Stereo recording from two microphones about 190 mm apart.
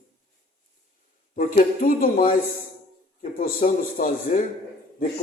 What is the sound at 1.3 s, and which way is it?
Speech, 45° left (ahead or behind).